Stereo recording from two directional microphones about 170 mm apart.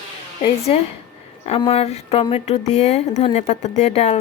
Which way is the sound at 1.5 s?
35° left (ahead or behind).